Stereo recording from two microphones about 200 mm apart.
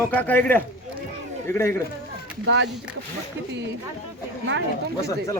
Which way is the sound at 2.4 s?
65° right (ahead or behind).